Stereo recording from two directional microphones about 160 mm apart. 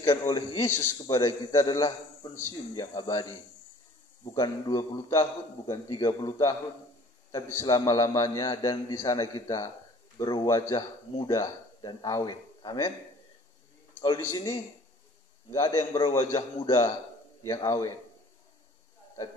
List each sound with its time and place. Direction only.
0.0 s a man's voice: 20° left (ahead or behind)
14.0 s a man's voice: 25° left (ahead or behind)